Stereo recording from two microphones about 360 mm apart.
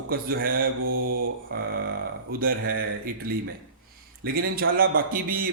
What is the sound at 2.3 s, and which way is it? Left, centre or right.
Speech, right.